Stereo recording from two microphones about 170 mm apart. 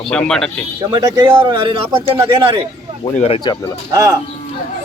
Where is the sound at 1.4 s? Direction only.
30° right (ahead or behind).